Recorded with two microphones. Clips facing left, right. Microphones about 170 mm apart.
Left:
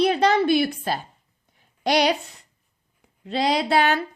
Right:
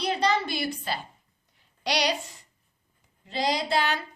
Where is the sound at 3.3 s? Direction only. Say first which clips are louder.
Left 5 dB; 65° left (ahead or behind).